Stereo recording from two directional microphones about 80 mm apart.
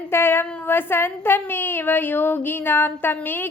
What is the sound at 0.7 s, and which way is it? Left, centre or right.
A woman's voice, left.